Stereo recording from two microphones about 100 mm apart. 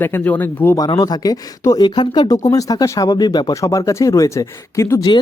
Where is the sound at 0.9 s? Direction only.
40° left (ahead or behind).